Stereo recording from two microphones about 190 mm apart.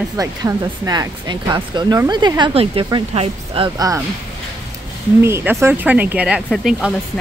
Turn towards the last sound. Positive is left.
turn(degrees=0)  # may be behind; listen again after turning